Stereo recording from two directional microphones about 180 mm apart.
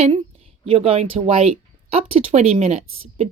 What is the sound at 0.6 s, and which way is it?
Speech, 35° right (ahead or behind).